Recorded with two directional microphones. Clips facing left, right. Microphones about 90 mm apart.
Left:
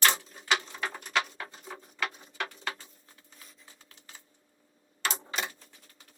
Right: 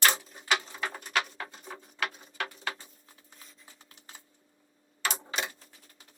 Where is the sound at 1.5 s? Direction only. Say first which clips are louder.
Even; 5° left (ahead or behind).